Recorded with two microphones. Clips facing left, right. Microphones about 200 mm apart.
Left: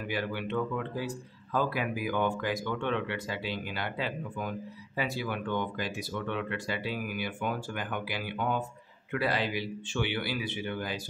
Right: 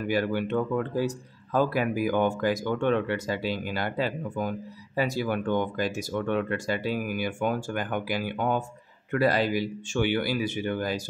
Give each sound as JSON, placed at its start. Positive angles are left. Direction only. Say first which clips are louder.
{"t": 0.1, "sound": "speech", "louder": "right 6 dB", "side_deg": -45}